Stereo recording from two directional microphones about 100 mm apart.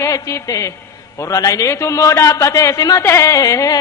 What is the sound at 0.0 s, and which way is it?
A man's voice, 30° left (ahead or behind).